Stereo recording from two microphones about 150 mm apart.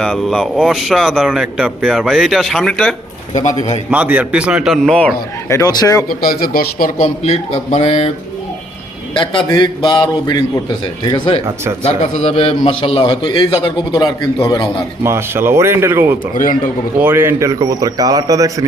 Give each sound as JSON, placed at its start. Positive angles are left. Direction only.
{"t": 0.0, "sound": "speech", "side_deg": 0}
{"t": 3.9, "sound": "a man's voice", "side_deg": -10}
{"t": 5.5, "sound": "a man's voice", "side_deg": 20}
{"t": 6.1, "sound": "speech", "side_deg": 80}
{"t": 7.0, "sound": "speech", "side_deg": 45}
{"t": 9.1, "sound": "a man's voice", "side_deg": 35}
{"t": 11.9, "sound": "a man's voice", "side_deg": 45}
{"t": 15.0, "sound": "a man's voice", "side_deg": -15}